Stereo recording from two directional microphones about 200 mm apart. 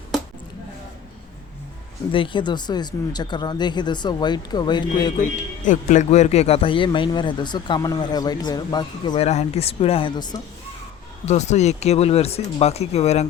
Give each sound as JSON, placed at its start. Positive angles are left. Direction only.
{"t": 2.1, "sound": "a man's voice", "side_deg": 25}
{"t": 5.1, "sound": "a man's voice", "side_deg": 40}
{"t": 11.3, "sound": "speech", "side_deg": 35}